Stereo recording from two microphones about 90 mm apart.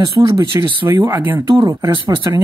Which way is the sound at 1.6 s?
45° right (ahead or behind).